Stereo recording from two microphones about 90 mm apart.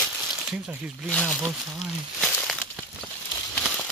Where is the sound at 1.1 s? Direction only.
5° left (ahead or behind).